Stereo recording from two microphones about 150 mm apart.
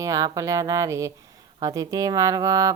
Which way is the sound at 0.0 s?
25° right (ahead or behind).